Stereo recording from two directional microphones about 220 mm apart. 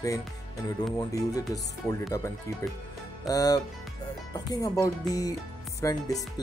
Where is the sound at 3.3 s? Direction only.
15° left (ahead or behind).